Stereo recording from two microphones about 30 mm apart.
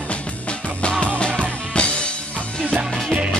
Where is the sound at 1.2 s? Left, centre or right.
Left.